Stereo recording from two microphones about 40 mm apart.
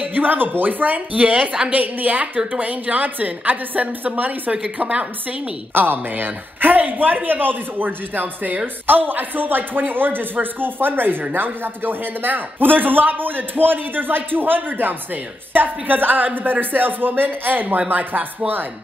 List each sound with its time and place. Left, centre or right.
0.0 s a man's voice: right
5.8 s a man's voice: right